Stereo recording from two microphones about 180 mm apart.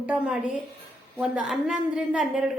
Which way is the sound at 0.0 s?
5° right (ahead or behind).